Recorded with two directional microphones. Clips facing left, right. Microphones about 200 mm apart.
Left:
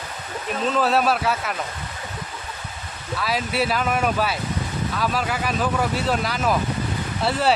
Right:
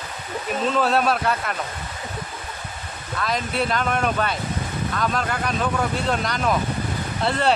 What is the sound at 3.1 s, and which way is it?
Speech, 5° left (ahead or behind).